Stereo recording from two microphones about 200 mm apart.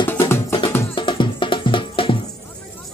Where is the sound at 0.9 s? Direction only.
25° left (ahead or behind).